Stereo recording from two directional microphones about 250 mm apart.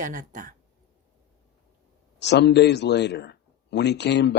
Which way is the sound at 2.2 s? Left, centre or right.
Left.